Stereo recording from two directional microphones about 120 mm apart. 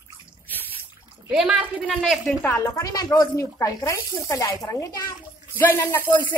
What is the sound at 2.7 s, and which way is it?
Speech, 30° left (ahead or behind).